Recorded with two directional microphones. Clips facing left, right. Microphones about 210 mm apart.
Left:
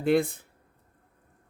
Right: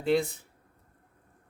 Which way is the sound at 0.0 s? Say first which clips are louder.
Left 3 dB; 55° left (ahead or behind).